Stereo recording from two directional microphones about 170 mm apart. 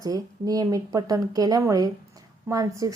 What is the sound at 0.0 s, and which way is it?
A woman's voice, 20° right (ahead or behind).